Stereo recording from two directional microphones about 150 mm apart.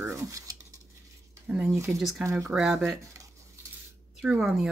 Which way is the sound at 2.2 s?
20° right (ahead or behind).